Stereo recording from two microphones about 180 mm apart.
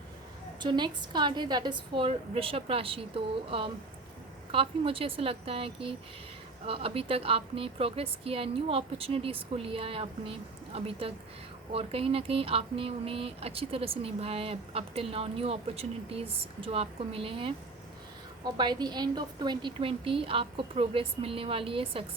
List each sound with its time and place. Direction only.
0.6 s a woman's voice: 25° right (ahead or behind)
4.5 s a woman's voice: 30° right (ahead or behind)